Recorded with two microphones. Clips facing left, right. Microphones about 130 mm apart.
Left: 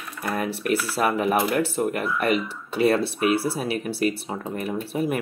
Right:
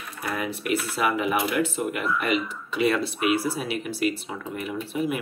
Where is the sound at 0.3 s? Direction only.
35° left (ahead or behind).